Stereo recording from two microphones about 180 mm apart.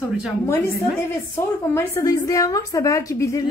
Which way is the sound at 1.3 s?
15° left (ahead or behind).